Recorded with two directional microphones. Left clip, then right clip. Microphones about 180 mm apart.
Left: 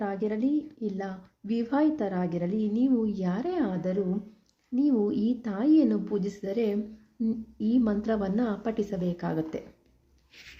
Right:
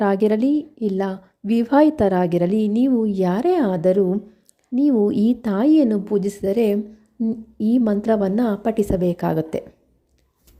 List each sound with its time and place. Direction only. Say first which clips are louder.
0.0 s a woman's voice: right 12 dB; 55° right (ahead or behind)